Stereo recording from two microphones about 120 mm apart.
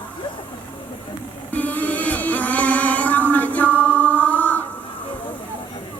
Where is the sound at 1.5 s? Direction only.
15° left (ahead or behind).